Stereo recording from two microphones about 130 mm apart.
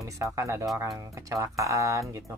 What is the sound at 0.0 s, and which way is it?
Speech, 25° right (ahead or behind).